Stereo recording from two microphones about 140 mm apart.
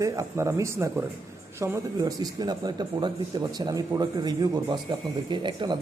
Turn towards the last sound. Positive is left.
turn(degrees=-35)  # may be behind; listen again after turning